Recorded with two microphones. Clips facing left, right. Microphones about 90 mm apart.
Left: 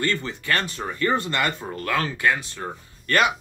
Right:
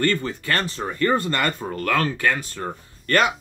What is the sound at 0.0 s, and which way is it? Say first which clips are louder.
Speech: right 3 dB; 40° right (ahead or behind).